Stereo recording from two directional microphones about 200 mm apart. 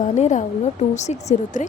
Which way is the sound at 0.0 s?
35° left (ahead or behind).